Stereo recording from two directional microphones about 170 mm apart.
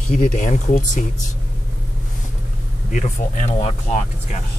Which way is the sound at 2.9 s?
50° left (ahead or behind).